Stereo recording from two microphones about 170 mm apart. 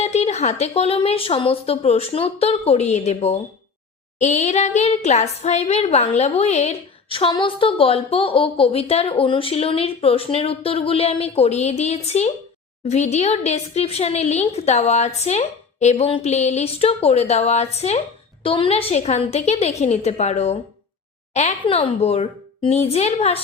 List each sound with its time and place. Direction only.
0.0 s a woman's voice: 40° left (ahead or behind)
21.6 s a woman's voice: 30° left (ahead or behind)